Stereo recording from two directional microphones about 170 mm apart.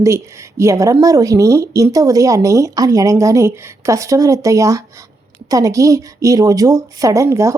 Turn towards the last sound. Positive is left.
turn(degrees=-20)  # may be behind; listen again after turning